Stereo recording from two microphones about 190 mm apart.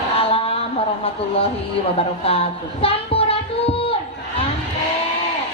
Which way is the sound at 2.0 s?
30° left (ahead or behind).